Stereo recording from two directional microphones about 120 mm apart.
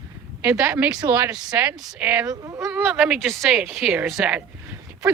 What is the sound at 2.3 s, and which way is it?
Speech, 30° right (ahead or behind).